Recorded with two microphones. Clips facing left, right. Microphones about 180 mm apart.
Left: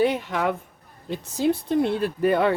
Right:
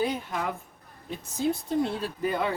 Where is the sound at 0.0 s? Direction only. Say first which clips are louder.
Left 7 dB; 75° left (ahead or behind).